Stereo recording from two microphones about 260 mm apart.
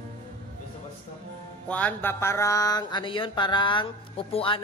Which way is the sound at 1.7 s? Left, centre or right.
Centre.